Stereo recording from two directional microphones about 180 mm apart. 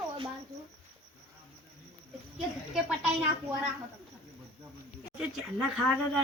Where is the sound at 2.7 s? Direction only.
5° right (ahead or behind).